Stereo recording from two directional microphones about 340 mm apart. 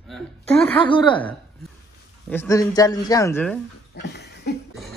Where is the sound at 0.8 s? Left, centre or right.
Centre.